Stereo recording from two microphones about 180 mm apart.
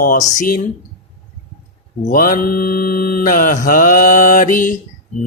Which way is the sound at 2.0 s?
50° left (ahead or behind).